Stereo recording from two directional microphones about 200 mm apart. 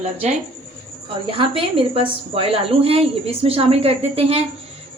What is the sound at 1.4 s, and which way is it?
A woman's voice, 25° right (ahead or behind).